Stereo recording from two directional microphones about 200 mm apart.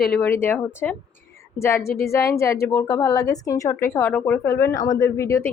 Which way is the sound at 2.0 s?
15° left (ahead or behind).